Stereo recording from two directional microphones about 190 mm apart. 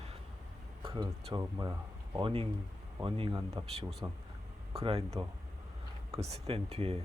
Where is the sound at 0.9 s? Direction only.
15° right (ahead or behind).